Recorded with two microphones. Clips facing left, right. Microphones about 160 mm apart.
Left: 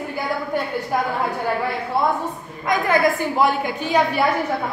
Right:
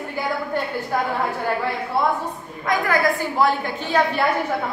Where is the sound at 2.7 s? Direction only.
20° left (ahead or behind).